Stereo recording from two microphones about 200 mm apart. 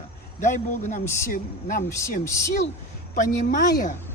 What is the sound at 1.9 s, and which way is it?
Speech, 15° left (ahead or behind).